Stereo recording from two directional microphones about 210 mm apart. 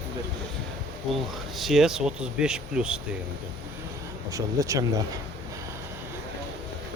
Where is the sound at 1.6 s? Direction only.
Centre (ahead or behind).